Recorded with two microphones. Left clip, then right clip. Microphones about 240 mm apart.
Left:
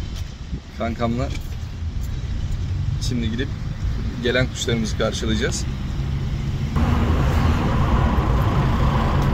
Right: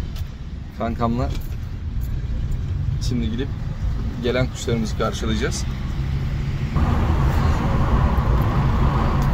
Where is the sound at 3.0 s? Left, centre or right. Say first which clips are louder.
Left 1 dB; centre.